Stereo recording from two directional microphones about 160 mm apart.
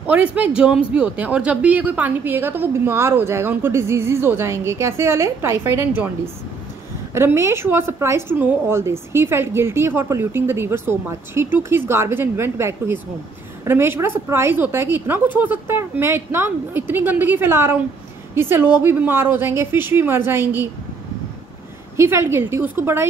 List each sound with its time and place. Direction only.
0.0 s speech: 10° right (ahead or behind)
7.2 s speech: 15° right (ahead or behind)
21.9 s speech: 15° right (ahead or behind)